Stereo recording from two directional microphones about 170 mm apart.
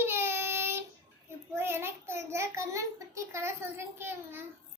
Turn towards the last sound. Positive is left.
turn(degrees=-15)  # may be behind; listen again after turning